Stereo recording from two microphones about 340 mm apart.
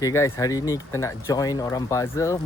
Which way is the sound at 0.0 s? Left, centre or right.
Centre.